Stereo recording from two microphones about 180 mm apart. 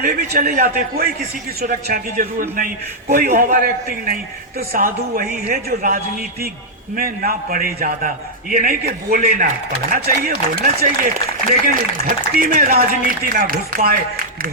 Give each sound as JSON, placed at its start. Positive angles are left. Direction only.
{"t": 0.0, "sound": "speech", "side_deg": -55}